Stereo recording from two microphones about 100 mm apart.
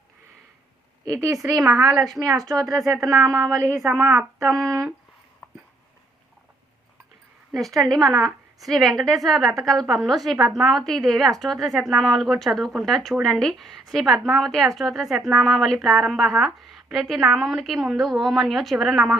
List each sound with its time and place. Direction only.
1.0 s speech: 35° right (ahead or behind)
1.9 s a woman's voice: centre (ahead or behind)
2.1 s speech: 35° right (ahead or behind)
3.8 s a woman's voice: centre (ahead or behind)
4.4 s speech: 30° right (ahead or behind)
7.5 s a woman's voice: centre (ahead or behind)